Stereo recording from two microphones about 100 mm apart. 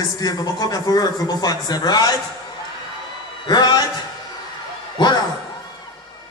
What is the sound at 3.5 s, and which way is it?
Speech, 45° left (ahead or behind).